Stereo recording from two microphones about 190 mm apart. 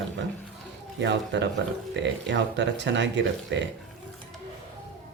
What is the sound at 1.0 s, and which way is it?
Speech, 70° right (ahead or behind).